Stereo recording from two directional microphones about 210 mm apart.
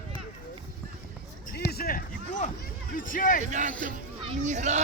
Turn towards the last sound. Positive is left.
turn(degrees=-35)  # may be behind; listen again after turning